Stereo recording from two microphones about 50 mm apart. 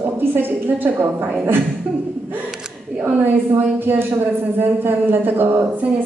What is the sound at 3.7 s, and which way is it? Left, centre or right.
A woman's voice, right.